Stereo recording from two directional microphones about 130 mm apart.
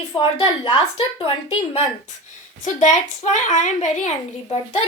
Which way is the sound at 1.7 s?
60° left (ahead or behind).